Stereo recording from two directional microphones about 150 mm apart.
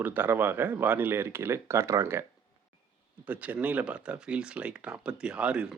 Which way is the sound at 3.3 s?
10° right (ahead or behind).